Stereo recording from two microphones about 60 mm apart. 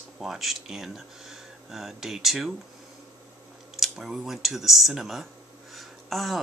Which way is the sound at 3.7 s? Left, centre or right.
Centre.